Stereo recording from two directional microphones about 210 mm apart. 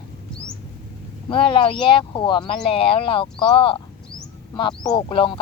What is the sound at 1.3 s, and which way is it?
Speech, 25° left (ahead or behind).